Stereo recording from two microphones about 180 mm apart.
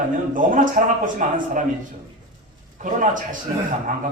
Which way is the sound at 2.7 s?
45° right (ahead or behind).